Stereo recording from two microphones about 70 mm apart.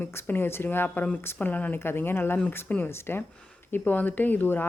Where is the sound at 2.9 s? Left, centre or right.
Left.